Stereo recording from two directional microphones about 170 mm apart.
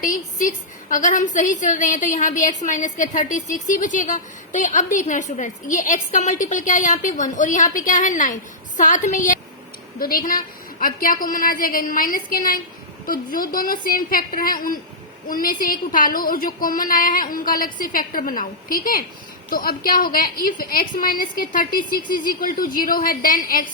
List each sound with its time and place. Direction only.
0.0 s a woman's voice: 50° left (ahead or behind)